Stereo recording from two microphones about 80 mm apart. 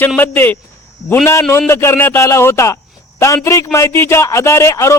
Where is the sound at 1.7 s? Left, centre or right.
Left.